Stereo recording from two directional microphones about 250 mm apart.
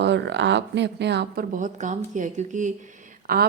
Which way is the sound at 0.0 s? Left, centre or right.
Right.